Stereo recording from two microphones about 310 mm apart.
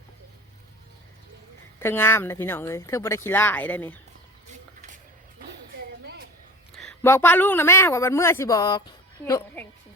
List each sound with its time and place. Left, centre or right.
1.8 s a man's voice: centre
6.7 s a man's voice: centre